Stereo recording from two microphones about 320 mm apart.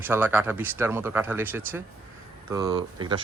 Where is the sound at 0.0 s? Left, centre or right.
Centre.